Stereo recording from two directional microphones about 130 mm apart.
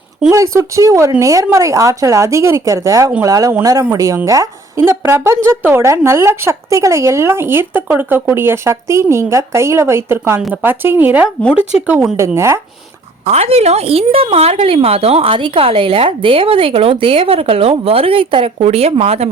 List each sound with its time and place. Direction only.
0.3 s speech: 25° right (ahead or behind)
13.2 s a woman's voice: 55° right (ahead or behind)